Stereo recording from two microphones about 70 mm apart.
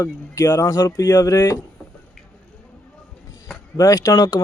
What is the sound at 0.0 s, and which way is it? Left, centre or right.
Speech, left.